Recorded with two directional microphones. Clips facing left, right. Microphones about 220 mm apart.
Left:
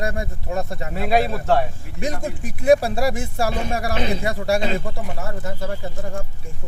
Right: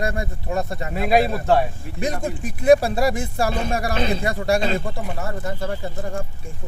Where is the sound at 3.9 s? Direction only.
15° left (ahead or behind).